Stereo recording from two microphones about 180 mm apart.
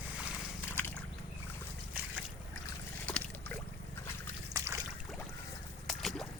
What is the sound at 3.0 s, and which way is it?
Boat, 10° left (ahead or behind).